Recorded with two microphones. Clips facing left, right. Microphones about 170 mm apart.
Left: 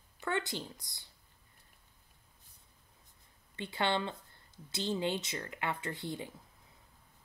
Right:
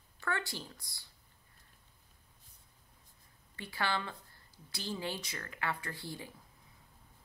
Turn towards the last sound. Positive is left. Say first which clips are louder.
# left 5 dB
turn(degrees=20)  # may be behind; listen again after turning